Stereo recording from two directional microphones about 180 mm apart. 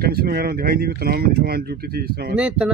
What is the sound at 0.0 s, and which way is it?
Speech, 60° right (ahead or behind).